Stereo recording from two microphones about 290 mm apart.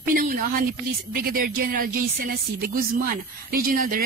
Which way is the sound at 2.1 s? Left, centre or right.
Right.